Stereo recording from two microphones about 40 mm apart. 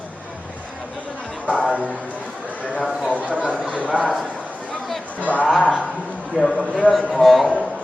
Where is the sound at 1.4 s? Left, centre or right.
Left.